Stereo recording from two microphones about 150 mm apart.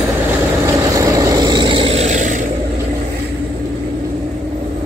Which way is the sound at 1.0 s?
25° right (ahead or behind).